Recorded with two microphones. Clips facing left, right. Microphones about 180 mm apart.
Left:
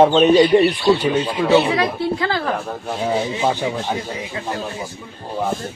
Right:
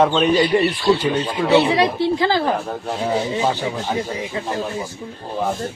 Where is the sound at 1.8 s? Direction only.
30° right (ahead or behind).